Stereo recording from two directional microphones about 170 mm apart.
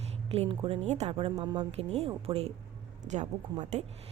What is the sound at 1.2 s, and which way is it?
A woman's voice, 30° right (ahead or behind).